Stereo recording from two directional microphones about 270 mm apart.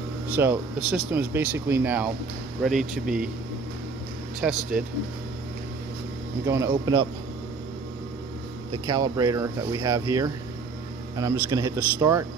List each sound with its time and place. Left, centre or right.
0.4 s speech: centre
4.4 s speech: centre
6.4 s speech: centre
8.8 s speech: centre